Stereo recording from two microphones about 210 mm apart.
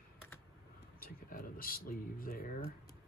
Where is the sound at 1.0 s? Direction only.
45° left (ahead or behind).